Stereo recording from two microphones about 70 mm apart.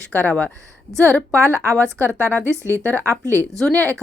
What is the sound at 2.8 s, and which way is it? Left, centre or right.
Speech, left.